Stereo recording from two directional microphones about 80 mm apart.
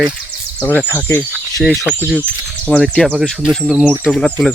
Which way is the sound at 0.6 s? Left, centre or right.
Centre.